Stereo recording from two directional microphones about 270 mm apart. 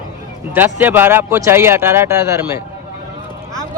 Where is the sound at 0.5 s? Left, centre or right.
Centre.